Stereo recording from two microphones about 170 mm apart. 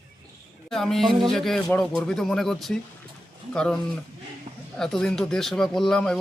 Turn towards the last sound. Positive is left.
turn(degrees=5)  # may be behind; listen again after turning